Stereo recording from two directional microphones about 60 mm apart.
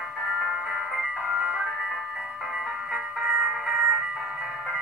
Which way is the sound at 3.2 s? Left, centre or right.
Centre.